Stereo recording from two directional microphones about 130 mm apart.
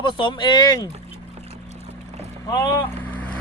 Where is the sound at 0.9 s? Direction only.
55° right (ahead or behind).